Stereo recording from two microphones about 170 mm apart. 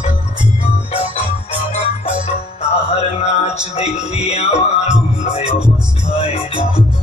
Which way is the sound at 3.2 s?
40° left (ahead or behind).